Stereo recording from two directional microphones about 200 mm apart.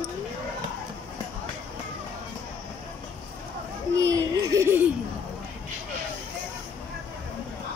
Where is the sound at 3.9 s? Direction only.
15° right (ahead or behind).